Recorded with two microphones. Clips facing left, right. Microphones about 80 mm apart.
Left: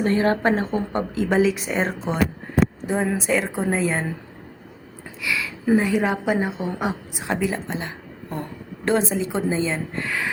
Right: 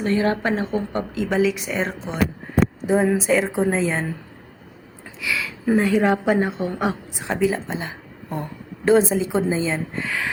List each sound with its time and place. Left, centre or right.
0.0 s a woman's voice: left
2.8 s a woman's voice: centre
5.2 s a woman's voice: centre